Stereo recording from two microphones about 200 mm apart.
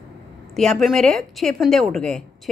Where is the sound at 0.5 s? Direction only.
Centre (ahead or behind).